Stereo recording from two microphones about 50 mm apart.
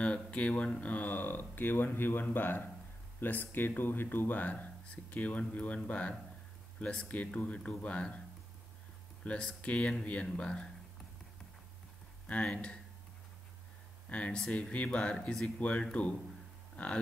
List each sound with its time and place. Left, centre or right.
0.0 s speech: left
9.2 s speech: left
12.4 s speech: centre
14.0 s speech: left